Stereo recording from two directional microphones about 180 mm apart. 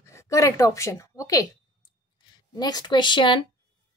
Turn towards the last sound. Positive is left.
turn(degrees=25)  # may be behind; listen again after turning